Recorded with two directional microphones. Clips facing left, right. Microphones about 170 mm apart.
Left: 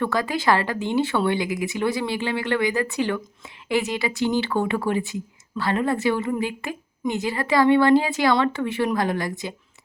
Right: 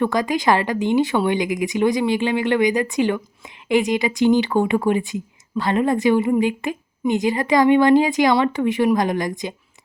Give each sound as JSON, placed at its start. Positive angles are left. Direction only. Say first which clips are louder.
{"t": 0.0, "sound": "speech", "louder": "right 4 dB", "side_deg": -15}